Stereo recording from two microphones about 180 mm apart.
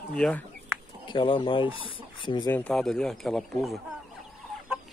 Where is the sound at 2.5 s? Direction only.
5° left (ahead or behind).